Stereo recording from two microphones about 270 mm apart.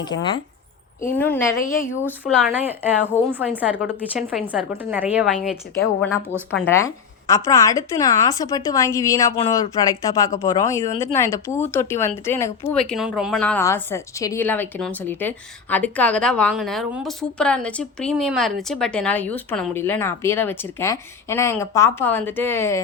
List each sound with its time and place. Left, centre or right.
0.0 s a woman's voice: centre
2.2 s a woman's voice: centre
6.6 s a woman's voice: centre